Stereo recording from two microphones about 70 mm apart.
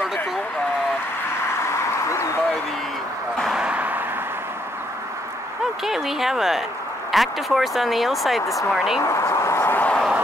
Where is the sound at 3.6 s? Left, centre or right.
Centre.